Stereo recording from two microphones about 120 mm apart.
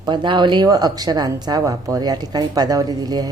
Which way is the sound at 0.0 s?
40° right (ahead or behind).